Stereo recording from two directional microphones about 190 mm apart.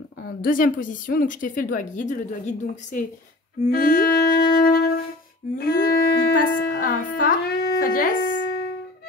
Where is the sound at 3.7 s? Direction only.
50° left (ahead or behind).